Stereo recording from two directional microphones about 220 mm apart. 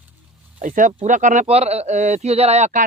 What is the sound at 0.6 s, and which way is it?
Speech, 35° right (ahead or behind).